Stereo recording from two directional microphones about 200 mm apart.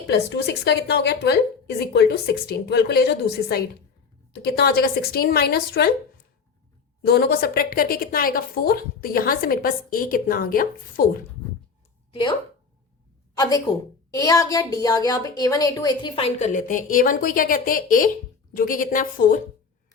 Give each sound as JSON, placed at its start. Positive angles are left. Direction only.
{"t": 0.1, "sound": "a woman's voice", "side_deg": 55}
{"t": 7.0, "sound": "a woman's voice", "side_deg": 50}
{"t": 12.1, "sound": "a woman's voice", "side_deg": 25}